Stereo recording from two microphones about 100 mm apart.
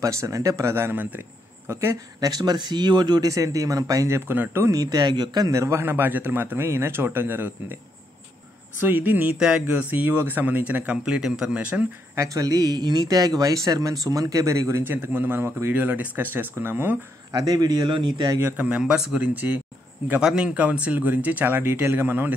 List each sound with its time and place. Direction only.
0.0 s a man's voice: 30° right (ahead or behind)
2.1 s speech: 40° right (ahead or behind)
4.3 s a man's voice: 25° right (ahead or behind)
4.7 s a man's voice: 40° right (ahead or behind); by 7.5 s 20° right (ahead or behind)
8.7 s a man's voice: 20° right (ahead or behind)
12.2 s speech: 35° right (ahead or behind); by 17.0 s 20° right (ahead or behind)
17.3 s a man's voice: 40° right (ahead or behind)
18.4 s speech: 15° right (ahead or behind)
19.2 s a man's voice: 20° right (ahead or behind)
20.1 s speech: 10° right (ahead or behind)